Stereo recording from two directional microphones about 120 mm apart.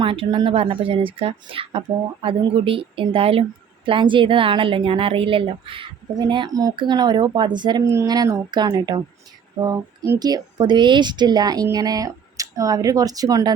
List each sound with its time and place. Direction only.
0.0 s a woman's voice: 45° right (ahead or behind); by 13.5 s 30° right (ahead or behind)